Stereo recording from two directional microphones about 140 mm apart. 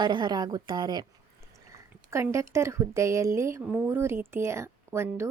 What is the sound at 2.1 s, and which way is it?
A woman's voice, 20° right (ahead or behind).